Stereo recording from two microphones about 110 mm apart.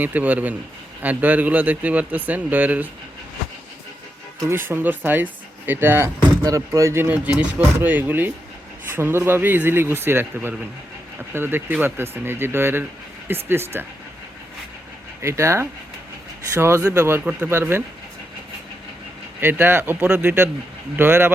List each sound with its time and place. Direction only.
0.0 s speech: 15° right (ahead or behind)
4.4 s speech: 20° right (ahead or behind)
6.4 s speech: 30° right (ahead or behind)
15.2 s speech: 25° right (ahead or behind)
19.4 s speech: 20° right (ahead or behind)